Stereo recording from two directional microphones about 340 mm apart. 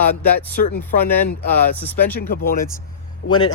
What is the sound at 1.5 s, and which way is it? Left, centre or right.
Speech, centre.